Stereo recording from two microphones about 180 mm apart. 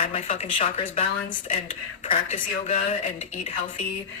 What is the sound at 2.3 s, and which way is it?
Speech, 35° left (ahead or behind).